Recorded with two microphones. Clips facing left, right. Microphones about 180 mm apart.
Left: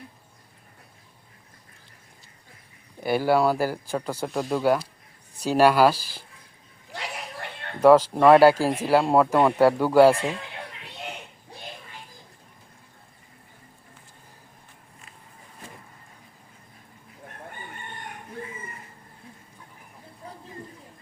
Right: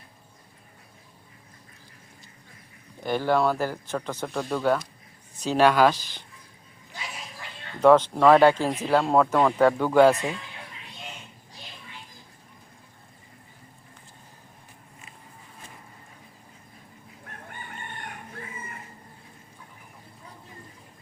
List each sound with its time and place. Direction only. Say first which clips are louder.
3.0 s speech: left 2 dB; 10° left (ahead or behind)
6.9 s a sound: left 5 dB; 65° left (ahead or behind)
7.8 s speech: left 2 dB; 5° left (ahead or behind)